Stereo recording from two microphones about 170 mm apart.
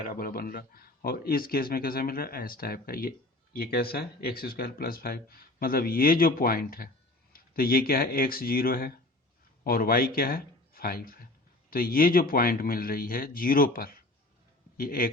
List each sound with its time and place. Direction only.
0.0 s speech: 55° left (ahead or behind)